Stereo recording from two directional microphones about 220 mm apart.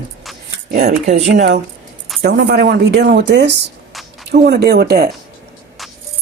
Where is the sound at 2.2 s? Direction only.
50° right (ahead or behind).